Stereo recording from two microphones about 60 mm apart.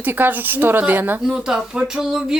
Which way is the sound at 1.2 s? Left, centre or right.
Centre.